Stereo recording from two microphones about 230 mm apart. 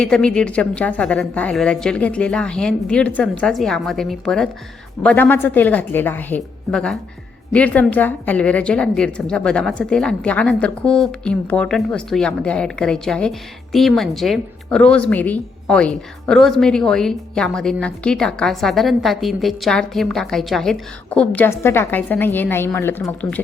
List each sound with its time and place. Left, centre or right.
0.0 s a woman's voice: centre